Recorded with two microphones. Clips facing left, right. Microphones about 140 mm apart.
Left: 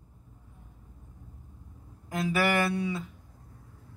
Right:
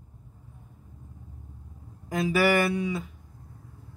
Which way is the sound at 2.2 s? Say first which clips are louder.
Right 4 dB; 5° right (ahead or behind).